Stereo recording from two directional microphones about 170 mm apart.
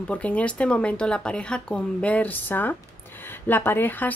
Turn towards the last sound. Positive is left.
turn(degrees=10)  # may be behind; listen again after turning